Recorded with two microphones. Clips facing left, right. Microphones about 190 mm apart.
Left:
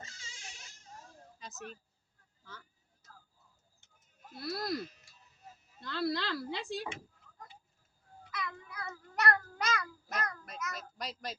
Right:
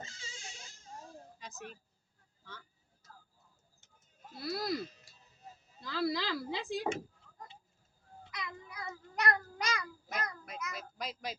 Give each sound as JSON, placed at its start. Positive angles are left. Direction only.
{"t": 0.0, "sound": "a sound", "side_deg": -25}
{"t": 1.4, "sound": "a woman's voice", "side_deg": 0}
{"t": 4.4, "sound": "speech", "side_deg": 0}
{"t": 5.8, "sound": "speech", "side_deg": -5}
{"t": 8.2, "sound": "meow", "side_deg": -20}